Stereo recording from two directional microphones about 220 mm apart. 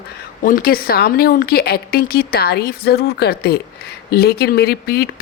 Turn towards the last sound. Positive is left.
turn(degrees=45)  # may be behind; listen again after turning